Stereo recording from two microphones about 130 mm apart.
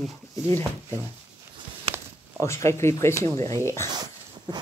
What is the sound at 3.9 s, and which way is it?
Dog, 30° right (ahead or behind).